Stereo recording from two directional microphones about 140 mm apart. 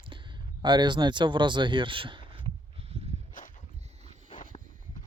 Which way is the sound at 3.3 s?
70° left (ahead or behind).